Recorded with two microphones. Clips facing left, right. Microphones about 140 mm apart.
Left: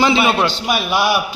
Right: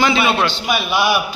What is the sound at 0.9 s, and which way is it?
Speech, 5° left (ahead or behind).